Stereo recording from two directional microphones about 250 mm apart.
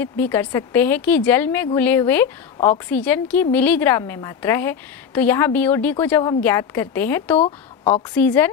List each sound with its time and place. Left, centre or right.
0.0 s a woman's voice: centre
7.3 s a woman's voice: left
8.1 s a woman's voice: centre